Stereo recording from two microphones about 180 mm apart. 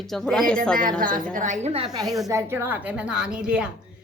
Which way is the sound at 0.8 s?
50° right (ahead or behind).